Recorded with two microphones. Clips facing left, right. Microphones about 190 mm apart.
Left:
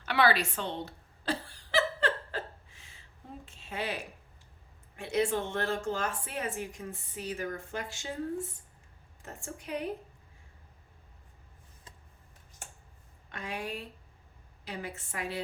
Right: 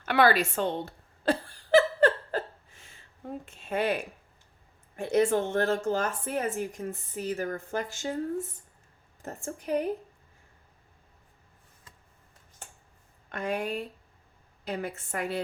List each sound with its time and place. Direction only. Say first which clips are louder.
0.0 s a sound: right 4 dB; 50° right (ahead or behind)
3.2 s speech: right 9 dB; 55° right (ahead or behind)
9.2 s speech: right 7 dB; 45° right (ahead or behind)
13.3 s speech: right 7 dB; 50° right (ahead or behind)